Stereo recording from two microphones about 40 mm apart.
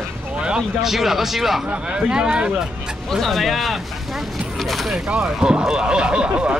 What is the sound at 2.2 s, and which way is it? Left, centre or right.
Speech, right.